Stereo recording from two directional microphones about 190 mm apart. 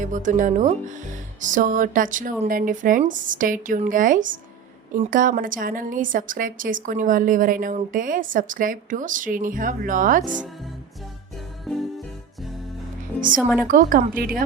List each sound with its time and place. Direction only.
0.0 s a woman's voice: 40° right (ahead or behind)
11.6 s music: centre (ahead or behind)
13.7 s a woman's voice: 45° right (ahead or behind)